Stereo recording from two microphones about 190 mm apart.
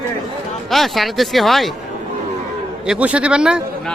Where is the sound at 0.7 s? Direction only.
Centre (ahead or behind).